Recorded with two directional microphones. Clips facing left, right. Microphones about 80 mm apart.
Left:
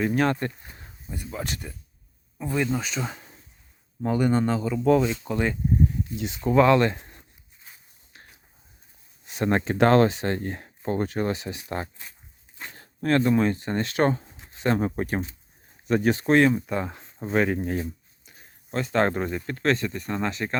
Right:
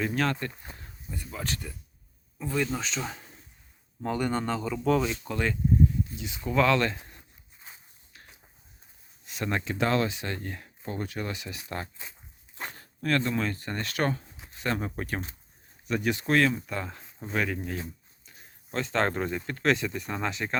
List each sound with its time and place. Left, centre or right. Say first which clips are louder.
0.0 s a man's voice: left 5 dB; centre
0.8 s a sound: left 4 dB; left
1.2 s a man's voice: left 3 dB; centre
6.4 s speech: left 6 dB; left
9.2 s speech: left 7 dB; left
9.7 s speech: left 9 dB; left
15.9 s speech: left 6 dB; left
16.3 s speech: left 5 dB; left
18.3 s speech: left 4 dB; centre